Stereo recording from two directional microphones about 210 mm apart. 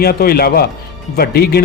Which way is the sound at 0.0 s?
45° left (ahead or behind).